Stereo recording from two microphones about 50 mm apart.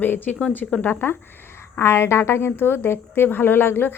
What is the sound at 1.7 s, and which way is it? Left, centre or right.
A woman's voice, left.